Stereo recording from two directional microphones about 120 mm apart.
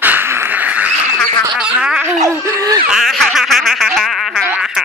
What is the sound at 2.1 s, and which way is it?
Snicker, 25° right (ahead or behind).